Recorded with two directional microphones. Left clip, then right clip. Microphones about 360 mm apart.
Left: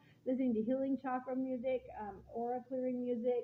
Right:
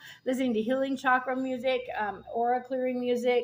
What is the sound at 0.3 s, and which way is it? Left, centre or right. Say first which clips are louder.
Speech: right 8 dB; centre.